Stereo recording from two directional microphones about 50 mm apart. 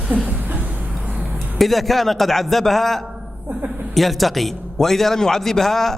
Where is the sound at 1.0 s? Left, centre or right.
Centre.